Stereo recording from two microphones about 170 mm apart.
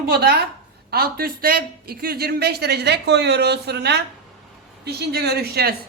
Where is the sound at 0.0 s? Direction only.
70° right (ahead or behind).